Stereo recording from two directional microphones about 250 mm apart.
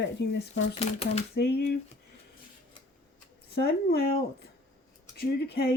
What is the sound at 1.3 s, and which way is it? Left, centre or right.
Speech, left.